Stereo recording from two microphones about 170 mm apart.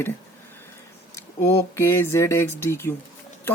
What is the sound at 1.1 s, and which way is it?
Speech, 15° left (ahead or behind).